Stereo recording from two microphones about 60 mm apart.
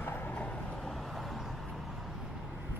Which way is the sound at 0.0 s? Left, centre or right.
Left.